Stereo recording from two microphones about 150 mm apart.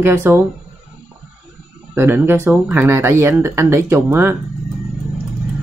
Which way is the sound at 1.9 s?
15° right (ahead or behind).